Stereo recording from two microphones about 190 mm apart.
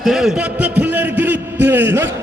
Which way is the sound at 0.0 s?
Centre (ahead or behind).